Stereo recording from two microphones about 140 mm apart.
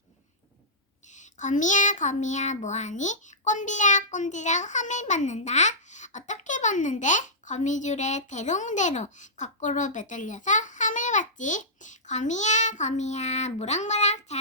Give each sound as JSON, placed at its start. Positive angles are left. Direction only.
{"t": 1.1, "sound": "child singing", "side_deg": 60}